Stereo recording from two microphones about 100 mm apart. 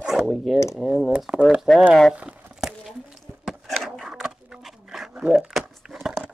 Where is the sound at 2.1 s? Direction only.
15° right (ahead or behind).